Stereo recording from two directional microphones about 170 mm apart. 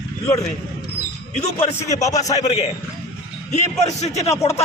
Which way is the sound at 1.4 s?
40° left (ahead or behind).